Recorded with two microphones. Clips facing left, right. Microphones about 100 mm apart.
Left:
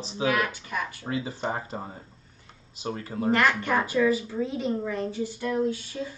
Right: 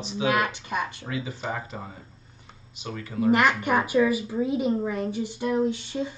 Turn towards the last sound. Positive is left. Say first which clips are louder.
# right 2 dB
turn(degrees=-20)  # may be behind; listen again after turning